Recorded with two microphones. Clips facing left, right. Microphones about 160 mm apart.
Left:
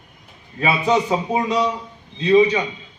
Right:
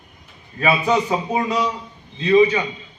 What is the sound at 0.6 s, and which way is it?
A man's voice, 20° left (ahead or behind).